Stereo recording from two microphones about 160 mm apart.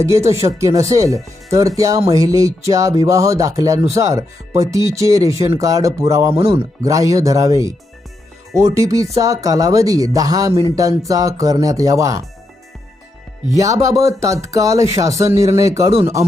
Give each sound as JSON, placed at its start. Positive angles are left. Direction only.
{"t": 0.0, "sound": "speech", "side_deg": -20}
{"t": 13.8, "sound": "speech", "side_deg": -20}